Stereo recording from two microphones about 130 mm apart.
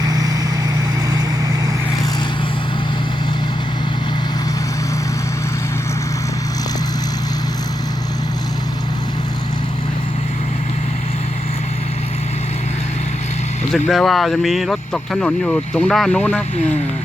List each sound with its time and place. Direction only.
0.0 s vehicle: 30° right (ahead or behind)
13.7 s speech: centre (ahead or behind)